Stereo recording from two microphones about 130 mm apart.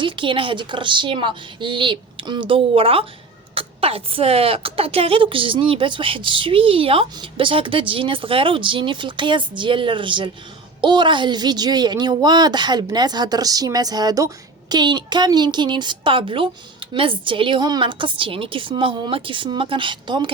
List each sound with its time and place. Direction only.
0.0 s a woman's voice: 40° right (ahead or behind)